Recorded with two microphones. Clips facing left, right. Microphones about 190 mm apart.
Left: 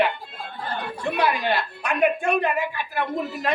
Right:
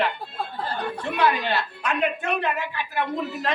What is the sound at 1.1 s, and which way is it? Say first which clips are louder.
A woman's voice: even; 10° left (ahead or behind).